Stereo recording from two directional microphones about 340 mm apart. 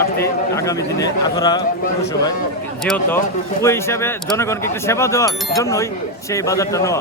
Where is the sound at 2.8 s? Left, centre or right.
Centre.